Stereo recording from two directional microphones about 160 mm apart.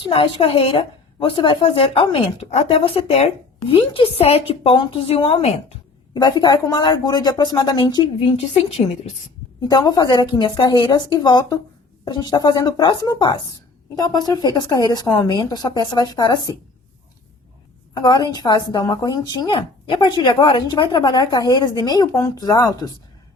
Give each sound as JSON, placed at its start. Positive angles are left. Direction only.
{"t": 0.0, "sound": "a woman's voice", "side_deg": 35}
{"t": 6.4, "sound": "speech", "side_deg": 25}
{"t": 9.6, "sound": "speech", "side_deg": 25}
{"t": 17.9, "sound": "speech", "side_deg": 25}